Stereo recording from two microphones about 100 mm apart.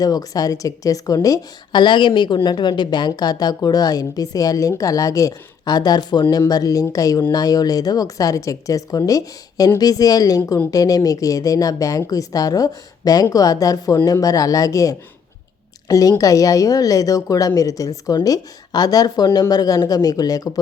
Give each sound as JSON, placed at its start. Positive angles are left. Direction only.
{"t": 0.0, "sound": "a woman's voice", "side_deg": 40}